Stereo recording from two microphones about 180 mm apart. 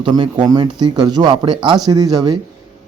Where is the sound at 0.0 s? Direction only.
25° right (ahead or behind).